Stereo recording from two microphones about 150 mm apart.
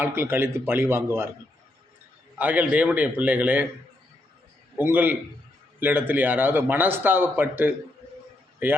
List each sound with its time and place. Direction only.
0.0 s a man's voice: 15° right (ahead or behind)
2.4 s a man's voice: 10° right (ahead or behind)
4.8 s a man's voice: 10° right (ahead or behind)